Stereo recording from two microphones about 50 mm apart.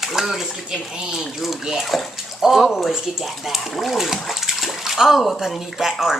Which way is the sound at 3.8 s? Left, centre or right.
Centre.